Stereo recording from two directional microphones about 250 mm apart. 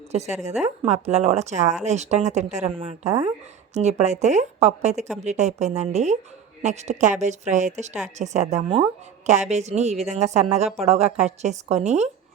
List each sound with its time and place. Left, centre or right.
0.6 s speech: right